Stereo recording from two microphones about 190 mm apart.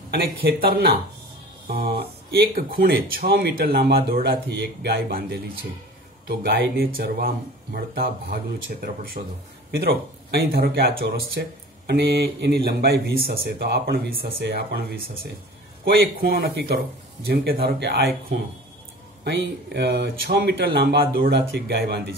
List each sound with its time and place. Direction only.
0.1 s speech: 50° right (ahead or behind)
19.2 s speech: 65° right (ahead or behind)